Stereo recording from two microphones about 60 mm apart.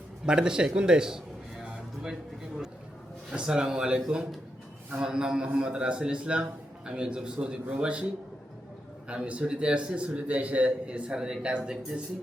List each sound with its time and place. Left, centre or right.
0.3 s a man's voice: centre
3.3 s a man's voice: centre
5.0 s a man's voice: centre
9.0 s a man's voice: right